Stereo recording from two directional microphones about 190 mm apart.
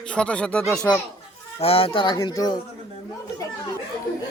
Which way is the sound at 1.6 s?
30° left (ahead or behind).